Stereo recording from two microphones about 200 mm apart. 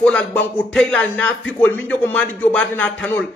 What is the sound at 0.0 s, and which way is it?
A man's voice, 5° left (ahead or behind).